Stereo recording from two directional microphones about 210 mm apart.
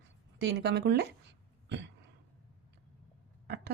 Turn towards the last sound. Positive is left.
turn(degrees=-50)  # may be behind; listen again after turning